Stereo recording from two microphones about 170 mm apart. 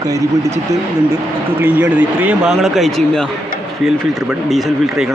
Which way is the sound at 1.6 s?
10° right (ahead or behind).